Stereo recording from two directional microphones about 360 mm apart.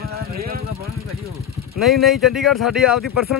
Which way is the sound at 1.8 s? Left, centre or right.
Centre.